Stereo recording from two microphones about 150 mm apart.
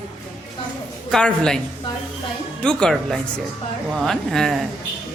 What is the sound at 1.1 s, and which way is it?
Speech, 5° left (ahead or behind).